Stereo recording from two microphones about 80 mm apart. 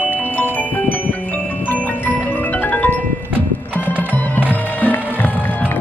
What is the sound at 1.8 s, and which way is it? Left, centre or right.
Glockenspiel, left.